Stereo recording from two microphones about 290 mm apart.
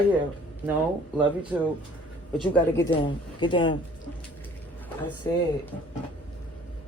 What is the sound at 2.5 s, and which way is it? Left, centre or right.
Speech, centre.